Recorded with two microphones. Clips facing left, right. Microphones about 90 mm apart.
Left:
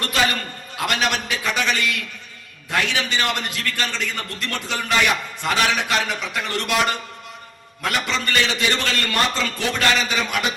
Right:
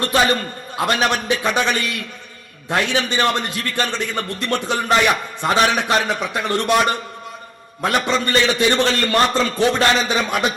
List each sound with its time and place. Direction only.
0.0 s a man's voice: 25° right (ahead or behind)